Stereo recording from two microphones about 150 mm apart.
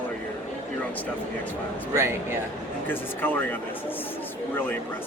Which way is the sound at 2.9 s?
10° left (ahead or behind).